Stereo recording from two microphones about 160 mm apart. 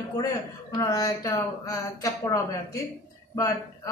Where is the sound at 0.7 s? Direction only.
20° left (ahead or behind).